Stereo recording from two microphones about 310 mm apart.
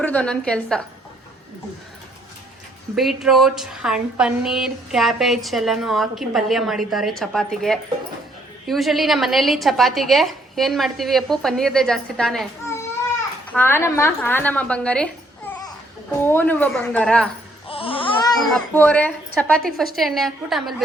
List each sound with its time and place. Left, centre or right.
0.0 s a woman's voice: centre
2.9 s a woman's voice: centre
17.7 s music: centre
18.5 s a woman's voice: centre